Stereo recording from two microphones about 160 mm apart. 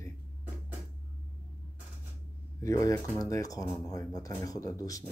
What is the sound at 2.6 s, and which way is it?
Speech, 20° left (ahead or behind).